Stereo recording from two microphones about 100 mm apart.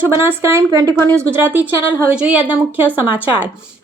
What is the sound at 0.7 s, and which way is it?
Speech, 35° right (ahead or behind).